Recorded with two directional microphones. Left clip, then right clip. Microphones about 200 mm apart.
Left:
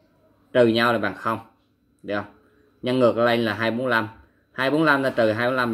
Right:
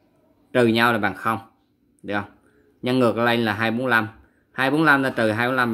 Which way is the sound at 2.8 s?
25° right (ahead or behind).